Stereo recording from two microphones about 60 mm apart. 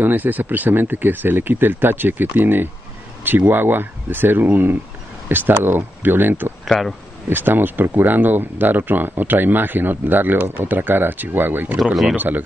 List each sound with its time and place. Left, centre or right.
0.0 s speech: right
6.6 s speech: centre
7.2 s speech: right
11.8 s speech: centre